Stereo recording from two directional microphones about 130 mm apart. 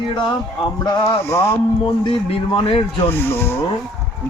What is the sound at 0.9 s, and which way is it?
Speech, 25° left (ahead or behind).